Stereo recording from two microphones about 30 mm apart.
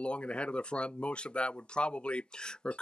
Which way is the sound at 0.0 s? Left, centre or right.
Left.